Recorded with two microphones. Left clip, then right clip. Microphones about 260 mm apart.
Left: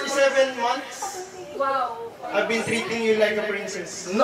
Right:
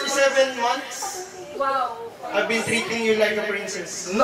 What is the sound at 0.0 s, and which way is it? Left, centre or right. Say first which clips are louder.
A woman's voice: right 1 dB; centre.